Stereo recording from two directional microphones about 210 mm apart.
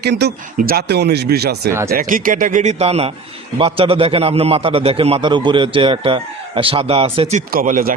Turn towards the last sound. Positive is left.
turn(degrees=-40)  # may be behind; listen again after turning